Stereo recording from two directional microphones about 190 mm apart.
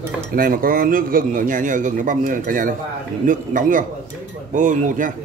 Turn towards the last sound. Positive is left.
turn(degrees=-45)  # may be behind; listen again after turning